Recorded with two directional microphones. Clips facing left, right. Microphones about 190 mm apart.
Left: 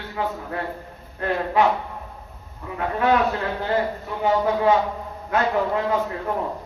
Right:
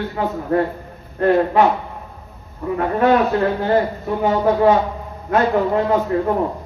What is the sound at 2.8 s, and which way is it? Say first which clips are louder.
Speech: right 5 dB; 45° right (ahead or behind).